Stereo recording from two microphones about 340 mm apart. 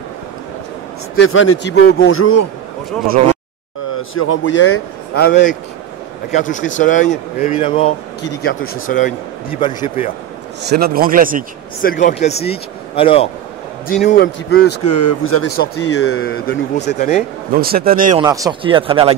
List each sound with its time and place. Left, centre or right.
1.1 s speech: left
4.1 s speech: left; by 10.0 s centre
10.6 s a man's voice: right
11.8 s speech: left
13.8 s speech: left
14.9 s speech: left
15.5 s speech: left
17.5 s a man's voice: right
18.2 s speech: centre